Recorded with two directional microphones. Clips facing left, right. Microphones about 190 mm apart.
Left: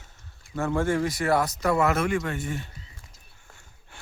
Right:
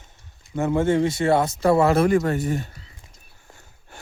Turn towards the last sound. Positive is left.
turn(degrees=-40)  # may be behind; listen again after turning